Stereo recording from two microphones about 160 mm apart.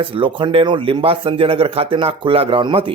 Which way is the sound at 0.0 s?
30° right (ahead or behind).